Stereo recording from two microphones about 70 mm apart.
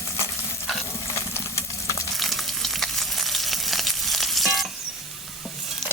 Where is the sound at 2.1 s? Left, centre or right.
Centre.